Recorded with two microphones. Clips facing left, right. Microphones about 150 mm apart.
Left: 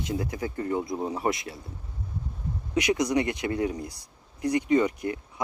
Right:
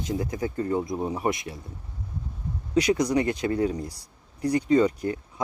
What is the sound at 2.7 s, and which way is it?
Speech, 30° right (ahead or behind).